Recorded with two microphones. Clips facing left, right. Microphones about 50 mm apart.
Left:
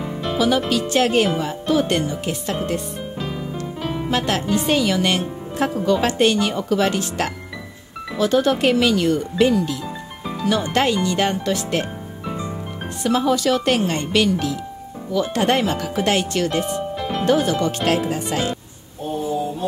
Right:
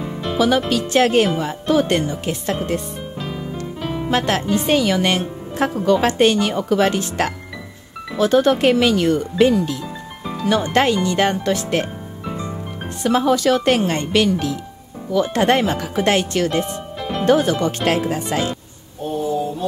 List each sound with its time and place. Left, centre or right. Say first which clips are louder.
0.0 s music: even; centre
0.7 s a woman's voice: right 2 dB; right
3.8 s music: right 1 dB; centre
4.1 s a woman's voice: right 2 dB; right
13.0 s a woman's voice: right 2 dB; right